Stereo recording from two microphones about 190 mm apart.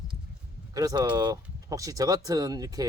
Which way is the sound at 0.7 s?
20° right (ahead or behind).